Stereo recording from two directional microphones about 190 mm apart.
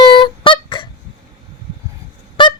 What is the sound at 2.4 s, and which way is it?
Honk, 25° left (ahead or behind).